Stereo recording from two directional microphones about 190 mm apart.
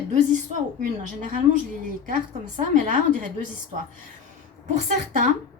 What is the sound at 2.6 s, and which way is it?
Speech, 45° right (ahead or behind).